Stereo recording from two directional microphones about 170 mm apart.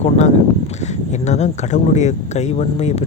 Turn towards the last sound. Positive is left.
turn(degrees=40)  # may be behind; listen again after turning